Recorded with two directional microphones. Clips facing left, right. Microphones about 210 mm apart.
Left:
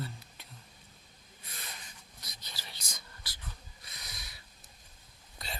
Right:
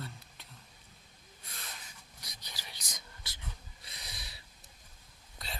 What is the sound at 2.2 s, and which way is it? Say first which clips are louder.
Whispering: left 1 dB; 15° right (ahead or behind).